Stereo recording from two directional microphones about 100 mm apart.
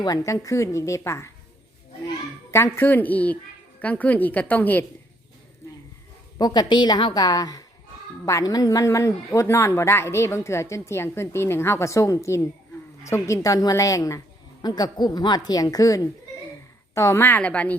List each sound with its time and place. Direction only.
0.0 s a woman's voice: 35° left (ahead or behind)
2.5 s a woman's voice: 25° left (ahead or behind)
6.4 s a woman's voice: 45° left (ahead or behind)
14.6 s a woman's voice: 45° left (ahead or behind); by 17.7 s 15° left (ahead or behind)